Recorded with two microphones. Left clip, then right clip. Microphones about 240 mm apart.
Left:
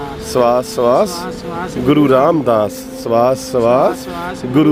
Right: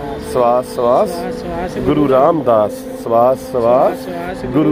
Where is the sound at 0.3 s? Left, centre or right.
Left.